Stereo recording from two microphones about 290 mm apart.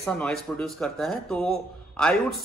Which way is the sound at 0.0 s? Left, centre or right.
Centre.